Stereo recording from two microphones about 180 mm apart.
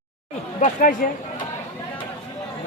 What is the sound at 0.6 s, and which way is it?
Speech, 45° left (ahead or behind).